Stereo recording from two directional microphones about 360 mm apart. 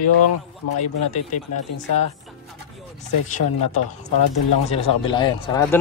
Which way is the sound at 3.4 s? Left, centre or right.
Left.